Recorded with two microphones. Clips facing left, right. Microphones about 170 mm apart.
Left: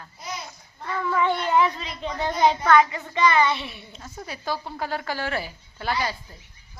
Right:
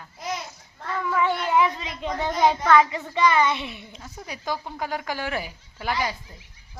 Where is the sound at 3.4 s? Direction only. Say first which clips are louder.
Even; 15° right (ahead or behind).